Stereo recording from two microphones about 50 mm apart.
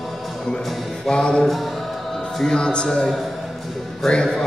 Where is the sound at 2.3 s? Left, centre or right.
Centre.